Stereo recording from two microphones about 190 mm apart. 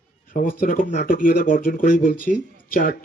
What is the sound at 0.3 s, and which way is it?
Speech, 45° left (ahead or behind).